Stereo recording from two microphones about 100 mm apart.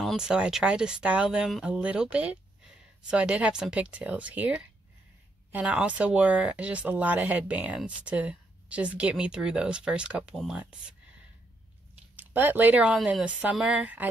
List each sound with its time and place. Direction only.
0.0 s speech: 5° right (ahead or behind)
12.2 s speech: 20° right (ahead or behind)